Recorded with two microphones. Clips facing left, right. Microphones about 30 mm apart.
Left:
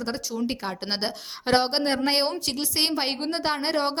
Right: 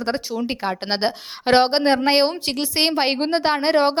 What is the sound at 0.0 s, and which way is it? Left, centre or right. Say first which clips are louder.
A woman's voice: right 5 dB; right.